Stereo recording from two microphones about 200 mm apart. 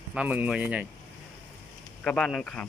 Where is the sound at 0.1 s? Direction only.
5° right (ahead or behind).